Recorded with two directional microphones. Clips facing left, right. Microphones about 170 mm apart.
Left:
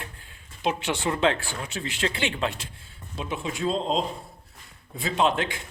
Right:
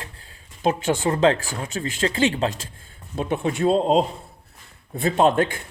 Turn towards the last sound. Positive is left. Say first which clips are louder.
# right 6 dB
turn(degrees=-50)  # may be behind; listen again after turning